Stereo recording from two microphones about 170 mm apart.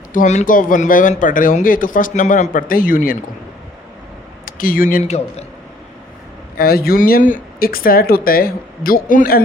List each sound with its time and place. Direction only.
0.1 s speech: 45° left (ahead or behind)
4.4 s speech: 55° left (ahead or behind)
6.6 s speech: 65° left (ahead or behind)